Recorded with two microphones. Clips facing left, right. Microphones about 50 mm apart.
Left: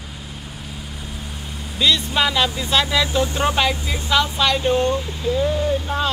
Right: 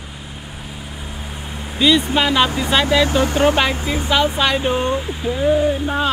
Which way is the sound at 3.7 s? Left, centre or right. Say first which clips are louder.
Right 4 dB; right.